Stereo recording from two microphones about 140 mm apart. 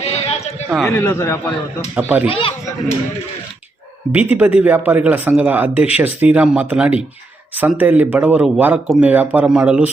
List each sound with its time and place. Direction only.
0.0 s a sound: 50° left (ahead or behind)
0.7 s speech: centre (ahead or behind)
0.9 s speech: 15° left (ahead or behind)
2.0 s speech: 10° right (ahead or behind)
2.2 s speech: 40° left (ahead or behind)
4.1 s speech: 10° right (ahead or behind)